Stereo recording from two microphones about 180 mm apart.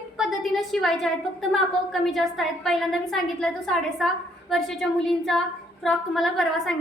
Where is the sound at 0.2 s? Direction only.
Centre (ahead or behind).